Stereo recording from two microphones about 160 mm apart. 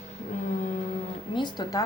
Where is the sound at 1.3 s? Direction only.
25° left (ahead or behind).